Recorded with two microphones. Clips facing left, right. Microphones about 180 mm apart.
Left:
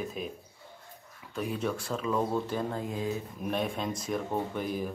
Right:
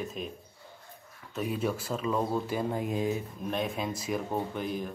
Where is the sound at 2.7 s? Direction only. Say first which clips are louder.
Right 3 dB; 15° right (ahead or behind).